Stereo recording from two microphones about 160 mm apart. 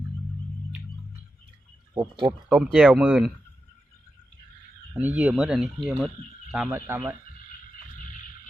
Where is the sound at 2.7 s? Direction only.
5° right (ahead or behind).